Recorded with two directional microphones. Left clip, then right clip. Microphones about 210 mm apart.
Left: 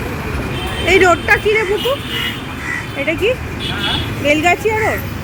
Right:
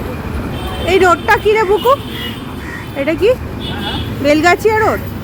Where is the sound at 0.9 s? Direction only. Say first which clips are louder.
Even; centre (ahead or behind).